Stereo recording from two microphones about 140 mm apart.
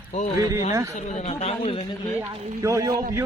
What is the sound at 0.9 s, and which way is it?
Speech, 50° left (ahead or behind).